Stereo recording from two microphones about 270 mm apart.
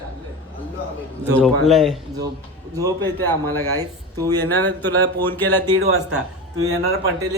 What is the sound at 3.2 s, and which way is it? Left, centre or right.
Speech, centre.